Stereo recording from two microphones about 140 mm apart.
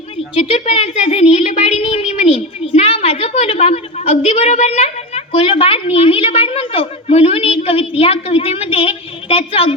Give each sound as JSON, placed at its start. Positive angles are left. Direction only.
{"t": 0.4, "sound": "a woman's voice", "side_deg": 45}